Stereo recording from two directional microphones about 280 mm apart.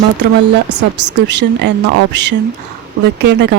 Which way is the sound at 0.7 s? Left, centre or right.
Right.